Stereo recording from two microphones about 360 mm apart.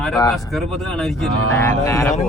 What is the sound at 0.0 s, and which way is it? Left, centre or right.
Speech, centre.